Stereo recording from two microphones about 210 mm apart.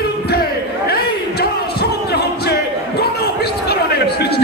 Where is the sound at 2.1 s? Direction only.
50° left (ahead or behind).